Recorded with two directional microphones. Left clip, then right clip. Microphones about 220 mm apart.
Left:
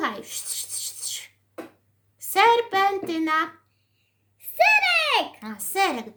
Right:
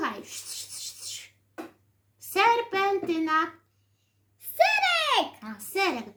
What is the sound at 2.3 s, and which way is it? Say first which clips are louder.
A child's voice: left 4 dB; 45° left (ahead or behind).